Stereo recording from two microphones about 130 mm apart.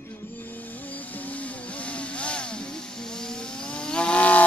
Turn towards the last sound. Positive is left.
turn(degrees=10)  # may be behind; listen again after turning